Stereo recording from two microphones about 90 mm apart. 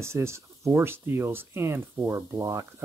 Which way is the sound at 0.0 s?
30° right (ahead or behind).